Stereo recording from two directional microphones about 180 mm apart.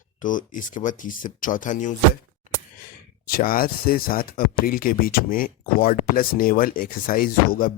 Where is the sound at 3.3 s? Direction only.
55° left (ahead or behind).